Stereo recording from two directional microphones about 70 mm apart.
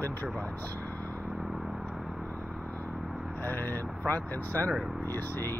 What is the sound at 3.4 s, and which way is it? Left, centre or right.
Speech, left.